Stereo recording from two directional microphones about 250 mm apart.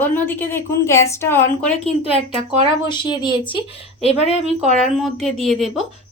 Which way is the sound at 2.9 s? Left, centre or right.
Centre.